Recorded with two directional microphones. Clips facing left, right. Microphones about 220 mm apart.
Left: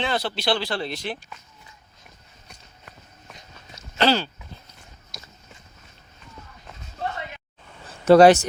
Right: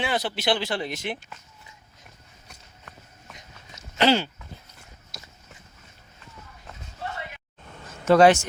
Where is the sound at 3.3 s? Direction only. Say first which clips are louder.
Left 2 dB; 15° right (ahead or behind).